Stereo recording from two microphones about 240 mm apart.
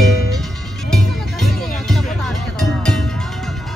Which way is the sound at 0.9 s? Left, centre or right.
Centre.